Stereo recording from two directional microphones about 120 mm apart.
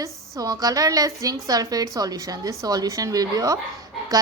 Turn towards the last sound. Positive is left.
turn(degrees=-30)  # may be behind; listen again after turning